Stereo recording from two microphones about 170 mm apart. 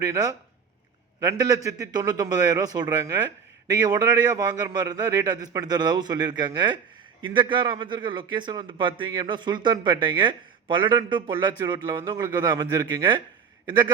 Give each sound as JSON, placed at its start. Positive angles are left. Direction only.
{"t": 0.0, "sound": "a man's voice", "side_deg": -20}